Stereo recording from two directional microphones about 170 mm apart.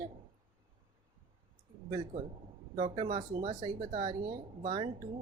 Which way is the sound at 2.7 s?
30° right (ahead or behind).